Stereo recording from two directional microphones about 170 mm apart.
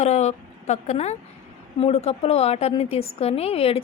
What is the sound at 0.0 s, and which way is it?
Speech, 40° left (ahead or behind).